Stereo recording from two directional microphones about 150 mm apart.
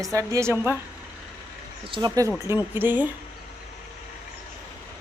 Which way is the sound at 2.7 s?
10° right (ahead or behind).